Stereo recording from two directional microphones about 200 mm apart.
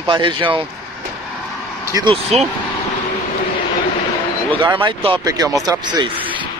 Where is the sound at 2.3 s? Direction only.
30° right (ahead or behind).